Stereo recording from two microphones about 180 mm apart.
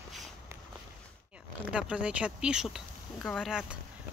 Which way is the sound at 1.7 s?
5° right (ahead or behind).